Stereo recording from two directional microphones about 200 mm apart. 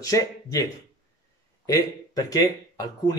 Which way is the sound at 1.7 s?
20° left (ahead or behind).